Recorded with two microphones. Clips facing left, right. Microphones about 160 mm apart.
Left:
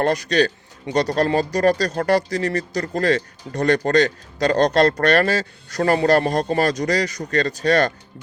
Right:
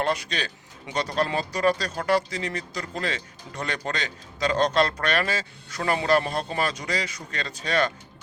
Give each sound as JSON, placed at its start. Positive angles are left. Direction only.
{"t": 0.0, "sound": "speech", "side_deg": 40}